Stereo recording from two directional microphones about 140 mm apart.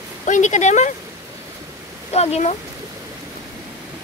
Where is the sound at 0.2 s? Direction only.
60° left (ahead or behind).